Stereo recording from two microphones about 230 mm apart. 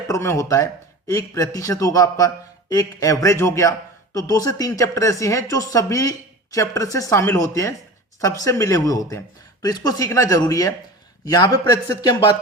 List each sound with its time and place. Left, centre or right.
0.1 s a man's voice: centre